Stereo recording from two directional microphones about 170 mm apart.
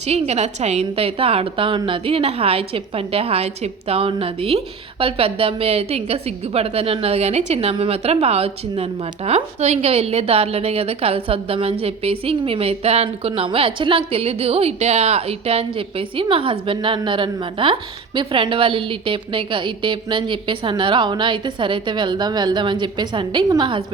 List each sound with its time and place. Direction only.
0.0 s a woman's voice: 40° right (ahead or behind)